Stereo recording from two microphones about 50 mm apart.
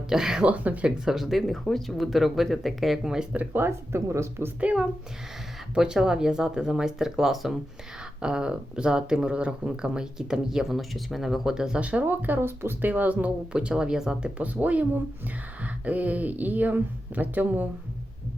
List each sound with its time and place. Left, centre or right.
0.1 s speech: centre
0.4 s speech: right
0.9 s speech: centre
3.5 s speech: right
4.6 s speech: right; by 7.6 s centre
8.2 s speech: centre
11.8 s speech: right
12.0 s speech: right
12.9 s speech: right
13.5 s speech: right
14.3 s speech: right